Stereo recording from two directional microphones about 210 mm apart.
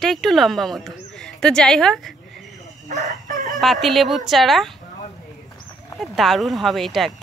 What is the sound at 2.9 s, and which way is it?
Chicken, 35° right (ahead or behind).